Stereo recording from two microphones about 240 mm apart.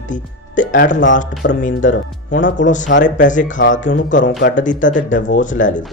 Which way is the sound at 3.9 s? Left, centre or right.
Left.